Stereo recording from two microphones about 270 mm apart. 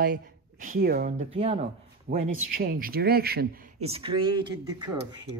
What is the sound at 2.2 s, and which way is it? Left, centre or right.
A man's voice, right.